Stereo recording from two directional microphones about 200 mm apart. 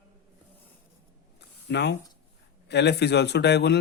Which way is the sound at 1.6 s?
60° left (ahead or behind).